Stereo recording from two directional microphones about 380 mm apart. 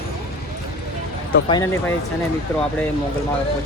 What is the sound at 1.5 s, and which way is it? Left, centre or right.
Speech, centre.